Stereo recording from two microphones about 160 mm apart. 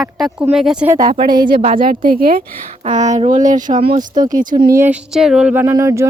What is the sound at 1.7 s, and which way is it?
Speech, 60° right (ahead or behind).